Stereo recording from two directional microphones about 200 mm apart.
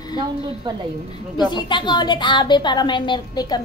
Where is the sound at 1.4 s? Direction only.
20° left (ahead or behind).